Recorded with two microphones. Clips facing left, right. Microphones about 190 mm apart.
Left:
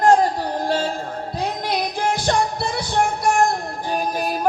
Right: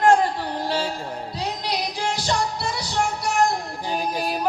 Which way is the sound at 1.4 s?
50° left (ahead or behind).